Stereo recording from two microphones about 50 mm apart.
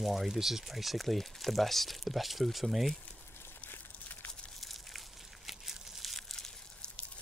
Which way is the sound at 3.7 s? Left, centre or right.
Left.